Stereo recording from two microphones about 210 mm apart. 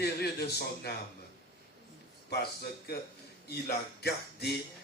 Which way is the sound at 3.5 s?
50° left (ahead or behind).